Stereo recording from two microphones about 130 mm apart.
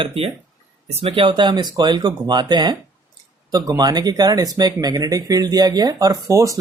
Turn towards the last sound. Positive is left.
turn(degrees=-25)  # may be behind; listen again after turning